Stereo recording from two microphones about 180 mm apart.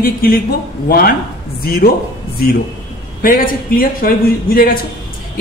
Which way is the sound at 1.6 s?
55° left (ahead or behind).